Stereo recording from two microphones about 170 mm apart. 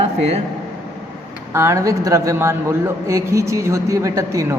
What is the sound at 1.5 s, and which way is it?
A man's voice, 15° right (ahead or behind).